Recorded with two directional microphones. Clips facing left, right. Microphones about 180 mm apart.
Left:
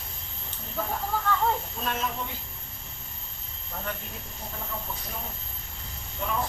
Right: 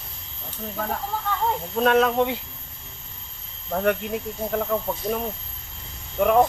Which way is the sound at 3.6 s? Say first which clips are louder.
Right 14 dB; 65° right (ahead or behind).